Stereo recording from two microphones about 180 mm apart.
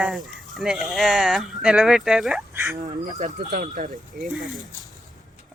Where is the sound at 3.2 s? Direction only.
45° right (ahead or behind).